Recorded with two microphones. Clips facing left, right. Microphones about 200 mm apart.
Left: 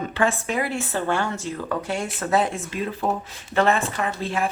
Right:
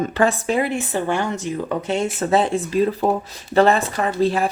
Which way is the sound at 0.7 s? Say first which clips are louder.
Right 3 dB; 15° right (ahead or behind).